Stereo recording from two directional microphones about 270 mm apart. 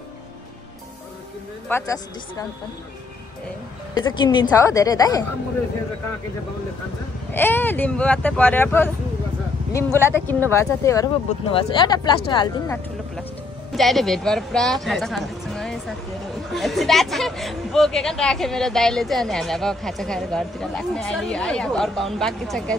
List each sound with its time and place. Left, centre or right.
1.7 s speech: centre
3.9 s speech: centre
7.3 s speech: centre
9.9 s speech: centre
13.7 s speech: centre